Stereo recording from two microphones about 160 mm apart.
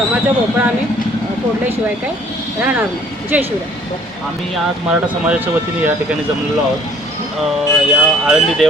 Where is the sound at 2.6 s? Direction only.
10° right (ahead or behind).